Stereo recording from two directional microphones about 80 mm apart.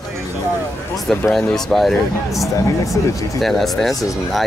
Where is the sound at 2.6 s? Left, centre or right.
Left.